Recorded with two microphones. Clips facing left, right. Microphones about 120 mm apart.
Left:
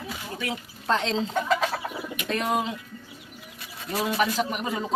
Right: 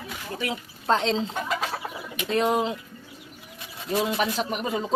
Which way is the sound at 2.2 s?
30° right (ahead or behind).